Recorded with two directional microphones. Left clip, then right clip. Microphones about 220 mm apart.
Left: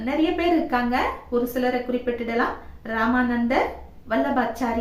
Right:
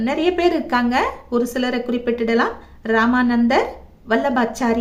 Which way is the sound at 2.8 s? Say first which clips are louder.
Right 6 dB; 50° right (ahead or behind).